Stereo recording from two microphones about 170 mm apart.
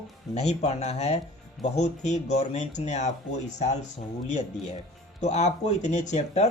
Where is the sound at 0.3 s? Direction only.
40° left (ahead or behind).